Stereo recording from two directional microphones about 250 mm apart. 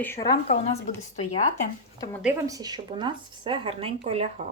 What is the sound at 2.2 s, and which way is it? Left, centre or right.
Speech, centre.